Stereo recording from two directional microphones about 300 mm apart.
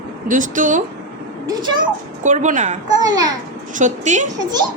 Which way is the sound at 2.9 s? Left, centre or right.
Centre.